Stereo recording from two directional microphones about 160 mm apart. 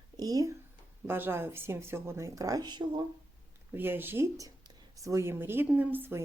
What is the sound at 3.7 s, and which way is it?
Speech, 15° right (ahead or behind).